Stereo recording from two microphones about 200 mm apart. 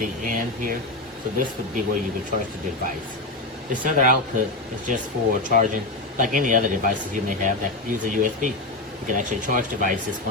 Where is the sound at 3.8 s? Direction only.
40° right (ahead or behind).